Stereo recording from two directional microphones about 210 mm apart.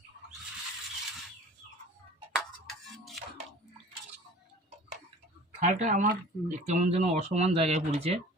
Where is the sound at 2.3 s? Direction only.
Centre (ahead or behind).